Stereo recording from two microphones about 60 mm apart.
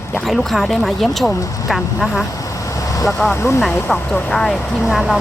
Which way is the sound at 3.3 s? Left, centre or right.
Left.